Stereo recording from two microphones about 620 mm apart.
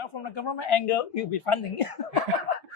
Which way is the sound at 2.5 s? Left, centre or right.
Left.